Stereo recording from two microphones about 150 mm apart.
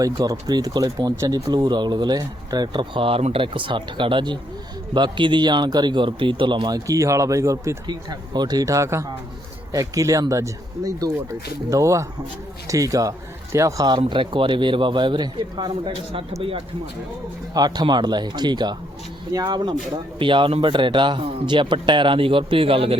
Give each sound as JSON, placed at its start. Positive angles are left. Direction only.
{"t": 0.0, "sound": "speech", "side_deg": -25}